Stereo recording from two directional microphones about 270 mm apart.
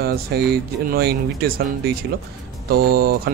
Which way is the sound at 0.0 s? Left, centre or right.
Right.